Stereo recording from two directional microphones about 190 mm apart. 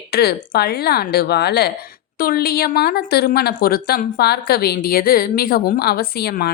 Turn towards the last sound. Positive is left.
turn(degrees=55)  # may be behind; listen again after turning